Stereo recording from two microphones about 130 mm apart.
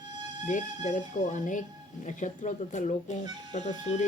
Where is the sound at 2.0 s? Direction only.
70° left (ahead or behind).